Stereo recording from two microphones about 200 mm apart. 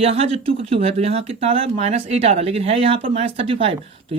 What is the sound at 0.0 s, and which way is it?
Speech, 30° right (ahead or behind).